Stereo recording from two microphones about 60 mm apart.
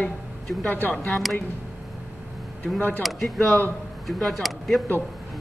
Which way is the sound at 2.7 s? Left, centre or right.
Left.